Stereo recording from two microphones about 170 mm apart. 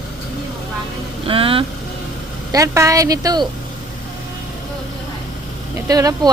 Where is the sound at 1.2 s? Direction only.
30° right (ahead or behind).